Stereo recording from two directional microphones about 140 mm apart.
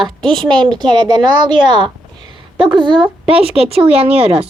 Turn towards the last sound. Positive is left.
turn(degrees=-45)  # may be behind; listen again after turning